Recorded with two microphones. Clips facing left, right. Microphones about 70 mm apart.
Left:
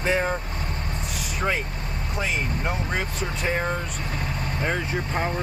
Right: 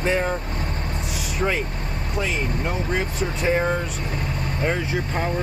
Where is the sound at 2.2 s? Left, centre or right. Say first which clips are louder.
Right 2 dB; centre.